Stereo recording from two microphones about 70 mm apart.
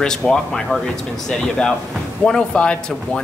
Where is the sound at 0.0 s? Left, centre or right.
Centre.